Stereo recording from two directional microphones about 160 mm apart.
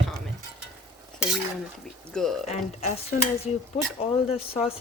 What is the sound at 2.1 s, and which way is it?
Speech, centre (ahead or behind).